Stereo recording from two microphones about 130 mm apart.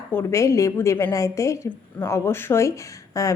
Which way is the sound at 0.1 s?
20° left (ahead or behind).